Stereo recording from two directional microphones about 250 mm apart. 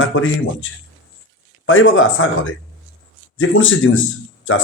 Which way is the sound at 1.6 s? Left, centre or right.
Left.